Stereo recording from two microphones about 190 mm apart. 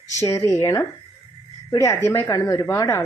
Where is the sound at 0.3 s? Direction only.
15° left (ahead or behind).